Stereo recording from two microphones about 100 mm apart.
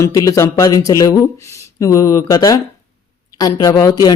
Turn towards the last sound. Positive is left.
turn(degrees=40)  # may be behind; listen again after turning